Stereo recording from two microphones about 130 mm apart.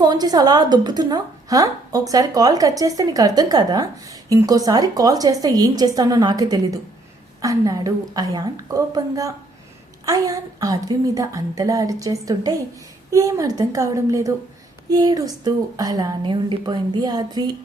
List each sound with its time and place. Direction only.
0.0 s a woman's voice: 30° right (ahead or behind)